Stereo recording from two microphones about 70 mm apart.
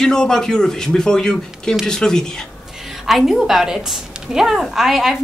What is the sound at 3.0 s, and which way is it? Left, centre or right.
A woman's voice, centre.